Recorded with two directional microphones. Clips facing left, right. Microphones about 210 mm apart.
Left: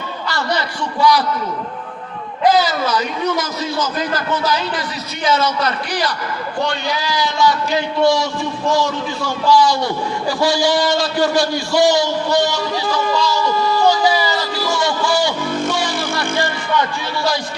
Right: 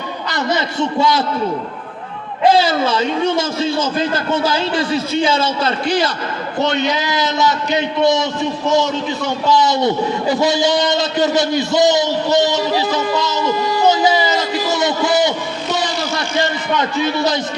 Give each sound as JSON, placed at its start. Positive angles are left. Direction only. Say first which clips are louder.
{"t": 0.3, "sound": "a man's voice", "louder": "right 2 dB", "side_deg": -20}
{"t": 2.4, "sound": "a man's voice", "louder": "right 2 dB", "side_deg": -25}
{"t": 15.7, "sound": "vehicle", "louder": "right 1 dB", "side_deg": -20}
{"t": 16.4, "sound": "a sound", "louder": "right 3 dB", "side_deg": -20}